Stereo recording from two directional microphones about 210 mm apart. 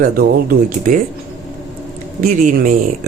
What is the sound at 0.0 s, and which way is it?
Speech, 40° right (ahead or behind).